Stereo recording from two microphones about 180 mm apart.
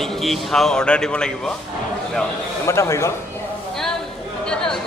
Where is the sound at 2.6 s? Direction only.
15° left (ahead or behind).